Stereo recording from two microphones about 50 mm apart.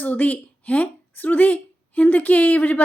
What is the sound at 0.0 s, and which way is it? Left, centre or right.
A woman's voice, left.